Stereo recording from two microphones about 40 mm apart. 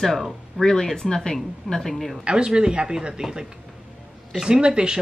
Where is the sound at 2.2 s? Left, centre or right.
Right.